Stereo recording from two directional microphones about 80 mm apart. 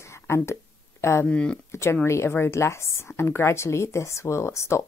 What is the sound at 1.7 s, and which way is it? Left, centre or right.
Speech, left.